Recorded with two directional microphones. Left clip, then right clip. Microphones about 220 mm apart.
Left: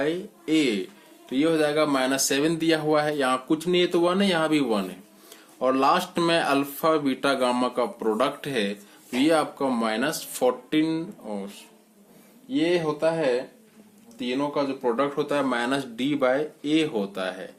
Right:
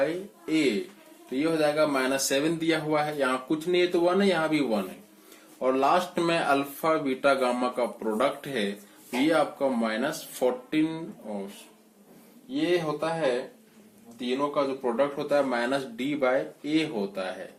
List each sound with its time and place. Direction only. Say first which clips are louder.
0.0 s speech: left 1 dB; 55° left (ahead or behind)
12.5 s speech: left 3 dB; 50° left (ahead or behind)
14.2 s speech: left 1 dB; 50° left (ahead or behind)